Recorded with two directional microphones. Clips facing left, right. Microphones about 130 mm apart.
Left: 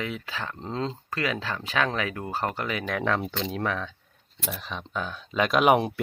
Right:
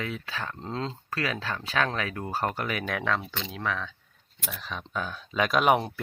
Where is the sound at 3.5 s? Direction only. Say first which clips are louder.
Even; 35° left (ahead or behind).